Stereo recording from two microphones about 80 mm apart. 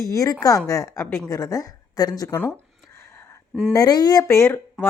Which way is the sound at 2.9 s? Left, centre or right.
Left.